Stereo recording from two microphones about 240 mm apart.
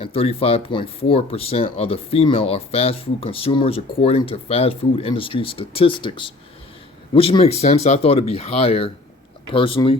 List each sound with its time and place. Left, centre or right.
0.0 s speech: left